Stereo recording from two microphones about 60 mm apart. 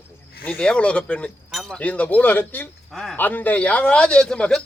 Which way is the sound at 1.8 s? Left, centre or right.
Left.